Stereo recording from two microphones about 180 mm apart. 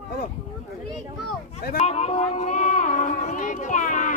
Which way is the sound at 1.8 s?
35° left (ahead or behind).